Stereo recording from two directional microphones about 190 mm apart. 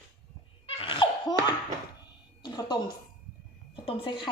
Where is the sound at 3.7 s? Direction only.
30° left (ahead or behind).